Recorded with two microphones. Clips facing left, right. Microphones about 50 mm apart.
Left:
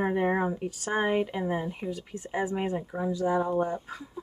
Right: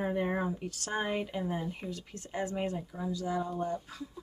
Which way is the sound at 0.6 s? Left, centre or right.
Centre.